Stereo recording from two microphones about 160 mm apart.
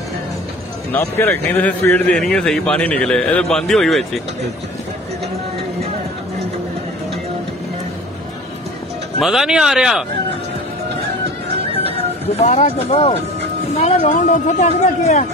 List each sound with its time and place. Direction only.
0.9 s a man's voice: 15° left (ahead or behind)
9.2 s speech: 5° right (ahead or behind)
11.9 s speech: 40° left (ahead or behind)